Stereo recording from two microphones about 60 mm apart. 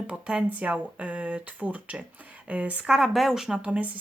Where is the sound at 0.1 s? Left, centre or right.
Centre.